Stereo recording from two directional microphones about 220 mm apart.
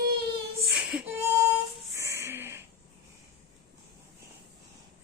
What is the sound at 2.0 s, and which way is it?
Music, 15° right (ahead or behind).